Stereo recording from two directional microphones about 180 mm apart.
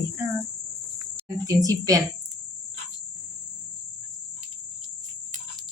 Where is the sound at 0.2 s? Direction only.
15° right (ahead or behind).